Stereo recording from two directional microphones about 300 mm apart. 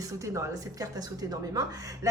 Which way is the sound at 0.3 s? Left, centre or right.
Centre.